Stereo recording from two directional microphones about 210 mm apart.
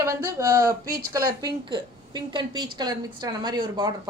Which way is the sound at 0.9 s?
45° right (ahead or behind).